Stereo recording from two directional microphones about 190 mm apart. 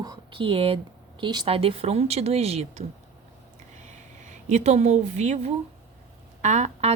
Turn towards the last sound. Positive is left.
turn(degrees=-35)  # may be behind; listen again after turning